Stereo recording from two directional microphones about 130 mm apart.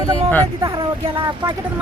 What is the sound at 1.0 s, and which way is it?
Speech, 45° right (ahead or behind).